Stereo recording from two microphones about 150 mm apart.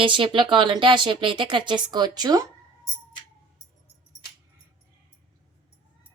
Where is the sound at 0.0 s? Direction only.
35° right (ahead or behind).